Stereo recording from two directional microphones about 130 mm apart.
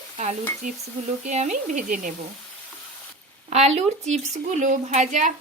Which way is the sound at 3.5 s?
55° right (ahead or behind).